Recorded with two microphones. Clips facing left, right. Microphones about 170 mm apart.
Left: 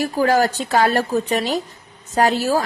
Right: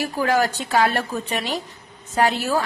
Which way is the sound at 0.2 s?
40° left (ahead or behind).